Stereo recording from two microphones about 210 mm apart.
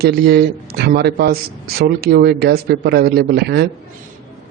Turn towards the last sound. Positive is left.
turn(degrees=-50)  # may be behind; listen again after turning